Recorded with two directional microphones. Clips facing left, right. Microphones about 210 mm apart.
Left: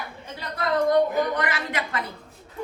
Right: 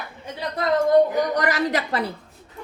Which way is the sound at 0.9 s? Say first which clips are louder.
Right 5 dB; 40° right (ahead or behind).